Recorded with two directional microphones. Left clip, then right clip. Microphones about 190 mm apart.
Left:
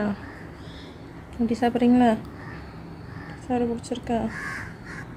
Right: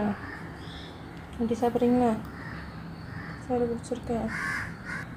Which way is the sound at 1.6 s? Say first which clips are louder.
Left 4 dB; 35° left (ahead or behind).